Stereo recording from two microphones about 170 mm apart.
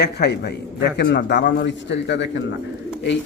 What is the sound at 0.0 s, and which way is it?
A man's voice, 80° left.